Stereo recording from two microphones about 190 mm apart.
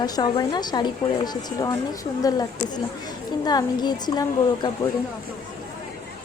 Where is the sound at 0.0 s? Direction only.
20° left (ahead or behind).